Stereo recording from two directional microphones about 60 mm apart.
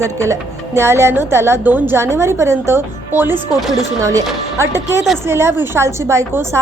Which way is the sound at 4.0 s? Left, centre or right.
Right.